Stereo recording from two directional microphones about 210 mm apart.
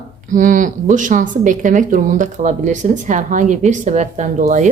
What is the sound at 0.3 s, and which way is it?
A woman's voice, 40° right (ahead or behind).